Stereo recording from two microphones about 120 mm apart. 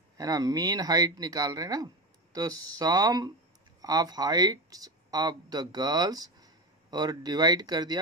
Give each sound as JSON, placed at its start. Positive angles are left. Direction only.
{"t": 0.2, "sound": "speech", "side_deg": -30}